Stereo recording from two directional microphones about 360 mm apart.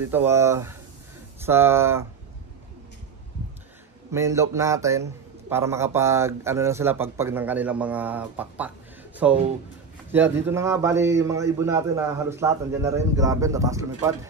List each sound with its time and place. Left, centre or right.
0.0 s a man's voice: centre
4.1 s a man's voice: centre